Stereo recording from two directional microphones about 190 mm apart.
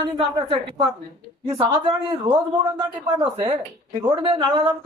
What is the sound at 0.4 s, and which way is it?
Speech, 25° right (ahead or behind).